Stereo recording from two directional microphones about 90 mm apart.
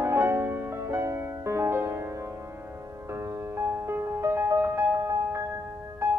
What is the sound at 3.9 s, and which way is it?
Music, 30° right (ahead or behind).